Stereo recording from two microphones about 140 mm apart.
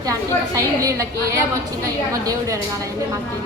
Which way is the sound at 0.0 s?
25° right (ahead or behind).